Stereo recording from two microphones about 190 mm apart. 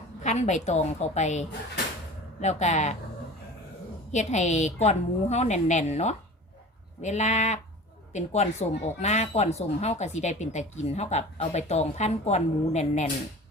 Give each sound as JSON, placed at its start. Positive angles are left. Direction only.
{"t": 0.2, "sound": "speech", "side_deg": 35}
{"t": 4.1, "sound": "speech", "side_deg": 40}